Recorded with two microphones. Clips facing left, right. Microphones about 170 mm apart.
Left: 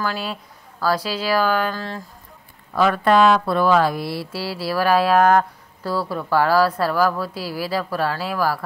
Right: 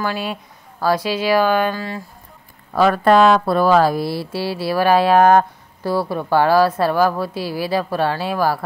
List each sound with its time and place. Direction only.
0.0 s speech: 20° right (ahead or behind)
1.8 s speech: 5° right (ahead or behind)
2.7 s speech: 40° right (ahead or behind)